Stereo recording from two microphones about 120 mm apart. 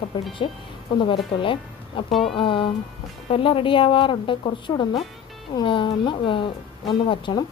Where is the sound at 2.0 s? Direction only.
45° left (ahead or behind).